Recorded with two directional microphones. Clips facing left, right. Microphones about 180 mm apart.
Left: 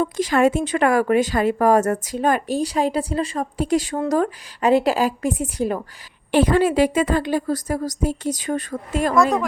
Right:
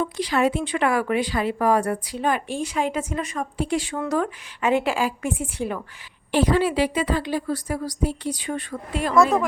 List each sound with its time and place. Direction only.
0.0 s speech: 45° left (ahead or behind)
6.3 s a woman's voice: 50° left (ahead or behind)
9.1 s speech: centre (ahead or behind)